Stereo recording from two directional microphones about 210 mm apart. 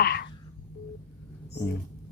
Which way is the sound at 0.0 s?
50° left (ahead or behind).